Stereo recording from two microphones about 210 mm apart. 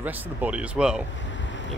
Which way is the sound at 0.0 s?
10° right (ahead or behind).